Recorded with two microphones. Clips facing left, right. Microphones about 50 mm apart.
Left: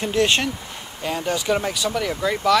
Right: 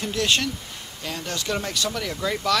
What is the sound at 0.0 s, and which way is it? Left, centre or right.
Speech, left.